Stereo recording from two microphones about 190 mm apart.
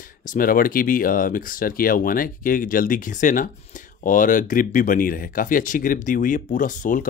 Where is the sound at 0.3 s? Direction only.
50° left (ahead or behind).